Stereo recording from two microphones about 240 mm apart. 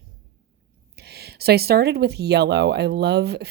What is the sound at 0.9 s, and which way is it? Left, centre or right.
Speech, right.